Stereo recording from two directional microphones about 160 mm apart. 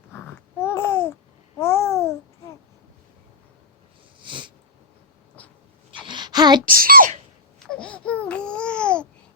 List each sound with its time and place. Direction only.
0.6 s babbling: 15° left (ahead or behind)
4.2 s cat: 30° right (ahead or behind)
5.4 s a sound: 10° left (ahead or behind)
6.0 s a sound: 30° right (ahead or behind)
6.7 s a child's voice: 65° right (ahead or behind)
7.7 s babbling: 5° left (ahead or behind)